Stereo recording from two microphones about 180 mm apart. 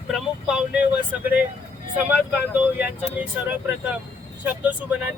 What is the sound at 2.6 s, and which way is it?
Speech, 10° right (ahead or behind).